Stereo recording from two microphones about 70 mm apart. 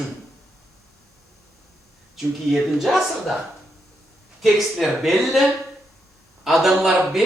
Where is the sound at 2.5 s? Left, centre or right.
Centre.